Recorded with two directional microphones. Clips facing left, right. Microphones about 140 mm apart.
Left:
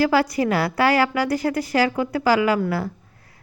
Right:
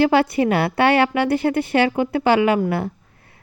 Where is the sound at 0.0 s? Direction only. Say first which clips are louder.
Right 3 dB; 25° right (ahead or behind).